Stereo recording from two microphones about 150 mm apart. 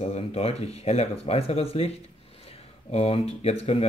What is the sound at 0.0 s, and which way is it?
Speech, 45° left (ahead or behind).